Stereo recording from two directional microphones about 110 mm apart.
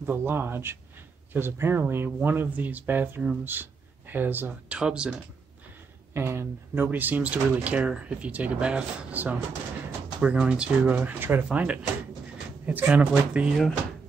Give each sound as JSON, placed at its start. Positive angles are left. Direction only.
{"t": 0.0, "sound": "speech", "side_deg": -20}
{"t": 6.1, "sound": "speech", "side_deg": -20}